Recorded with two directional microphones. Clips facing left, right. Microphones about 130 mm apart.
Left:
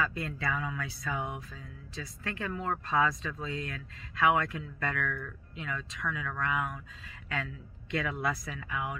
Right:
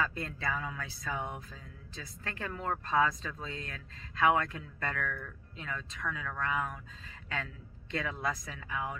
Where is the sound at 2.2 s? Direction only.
35° right (ahead or behind).